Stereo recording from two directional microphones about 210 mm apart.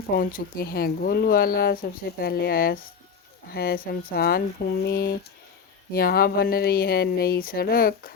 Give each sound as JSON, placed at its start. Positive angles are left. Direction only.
{"t": 0.1, "sound": "speech", "side_deg": 40}